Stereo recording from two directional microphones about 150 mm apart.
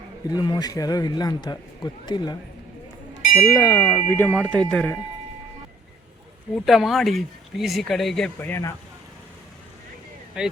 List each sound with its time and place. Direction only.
0.3 s a man's voice: 25° left (ahead or behind)
3.5 s chime: 25° left (ahead or behind); by 4.9 s 5° left (ahead or behind)
6.7 s speech: centre (ahead or behind)
8.4 s chime: 15° left (ahead or behind)
10.4 s speech: 5° right (ahead or behind)